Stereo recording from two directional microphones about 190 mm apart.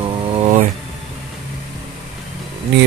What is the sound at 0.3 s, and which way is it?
Vehicle, 35° right (ahead or behind).